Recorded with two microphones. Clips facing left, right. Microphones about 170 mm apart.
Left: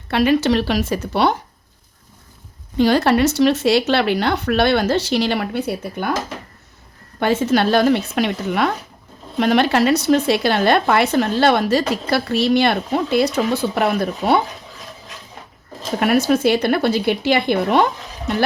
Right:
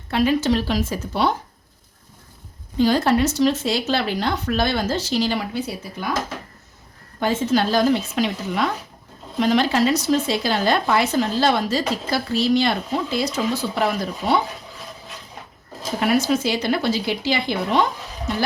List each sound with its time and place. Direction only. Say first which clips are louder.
0.1 s speech: left 3 dB; 70° left (ahead or behind)
2.7 s speech: left 3 dB; 70° left (ahead or behind)
7.2 s speech: left 3 dB; 70° left (ahead or behind)
16.0 s speech: left 3 dB; 55° left (ahead or behind)